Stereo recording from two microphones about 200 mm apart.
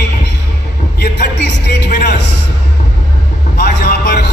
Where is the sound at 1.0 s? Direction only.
60° left (ahead or behind).